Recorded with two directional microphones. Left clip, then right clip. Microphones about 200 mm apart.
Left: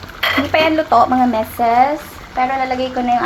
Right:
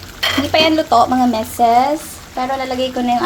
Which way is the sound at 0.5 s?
30° right (ahead or behind).